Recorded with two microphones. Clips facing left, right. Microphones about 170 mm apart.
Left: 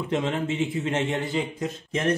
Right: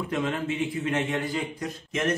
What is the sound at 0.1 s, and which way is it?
A man's voice, 25° left (ahead or behind).